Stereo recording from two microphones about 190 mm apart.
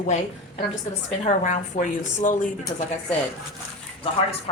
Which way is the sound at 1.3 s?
40° left (ahead or behind).